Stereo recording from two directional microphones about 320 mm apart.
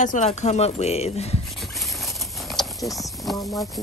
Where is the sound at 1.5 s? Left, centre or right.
Centre.